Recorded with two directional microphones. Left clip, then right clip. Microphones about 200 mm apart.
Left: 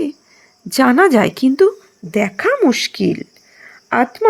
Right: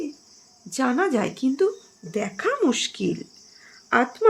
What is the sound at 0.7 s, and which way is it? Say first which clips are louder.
Speech: left 11 dB; 50° left (ahead or behind).